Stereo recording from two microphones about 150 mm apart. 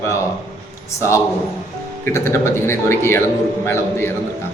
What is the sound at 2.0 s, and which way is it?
A man's voice, 20° left (ahead or behind).